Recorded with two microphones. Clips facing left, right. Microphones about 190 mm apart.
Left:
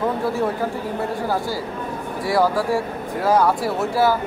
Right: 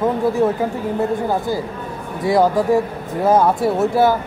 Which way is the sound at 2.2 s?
20° right (ahead or behind).